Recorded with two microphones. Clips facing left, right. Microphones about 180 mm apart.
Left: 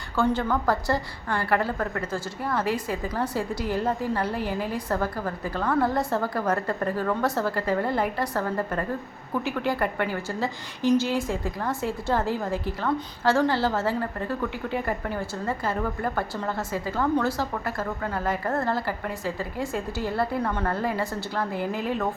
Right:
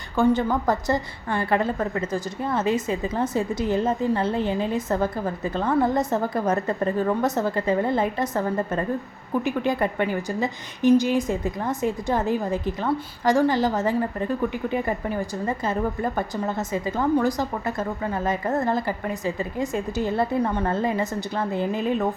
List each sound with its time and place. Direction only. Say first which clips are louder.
0.2 s a woman's voice: right 4 dB; 20° right (ahead or behind)